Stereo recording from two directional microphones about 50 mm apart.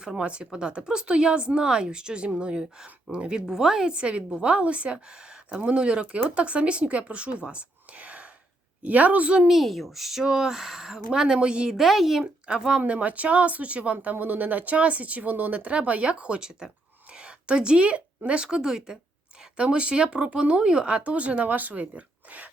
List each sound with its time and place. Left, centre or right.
0.0 s speech: centre
3.8 s speech: right
7.5 s whispering: right
8.8 s speech: right
9.5 s speech: centre
11.7 s speech: centre
12.2 s speech: centre
17.1 s a sound: right
18.4 s speech: centre
19.5 s speech: right